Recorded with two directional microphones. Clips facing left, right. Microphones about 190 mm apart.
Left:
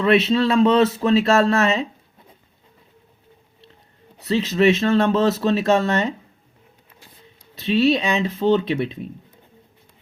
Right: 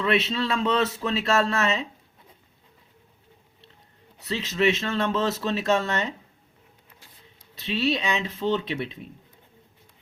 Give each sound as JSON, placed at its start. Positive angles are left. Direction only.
{"t": 0.0, "sound": "speech", "side_deg": 40}
{"t": 4.3, "sound": "speech", "side_deg": 35}
{"t": 7.6, "sound": "speech", "side_deg": 40}